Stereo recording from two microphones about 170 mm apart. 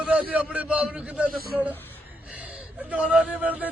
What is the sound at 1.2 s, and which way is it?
Speech, 60° right (ahead or behind).